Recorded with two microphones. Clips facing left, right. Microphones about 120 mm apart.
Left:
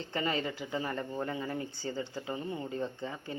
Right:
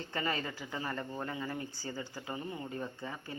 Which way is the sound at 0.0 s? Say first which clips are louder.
Left 3 dB; 20° left (ahead or behind).